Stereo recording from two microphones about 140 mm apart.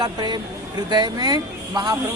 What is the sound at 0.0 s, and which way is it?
A man's voice, 30° right (ahead or behind).